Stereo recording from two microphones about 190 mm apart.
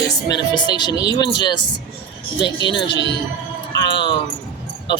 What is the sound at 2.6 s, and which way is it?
Speech, 25° left (ahead or behind).